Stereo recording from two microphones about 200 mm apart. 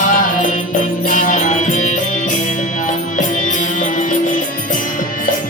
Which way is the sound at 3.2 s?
40° left (ahead or behind).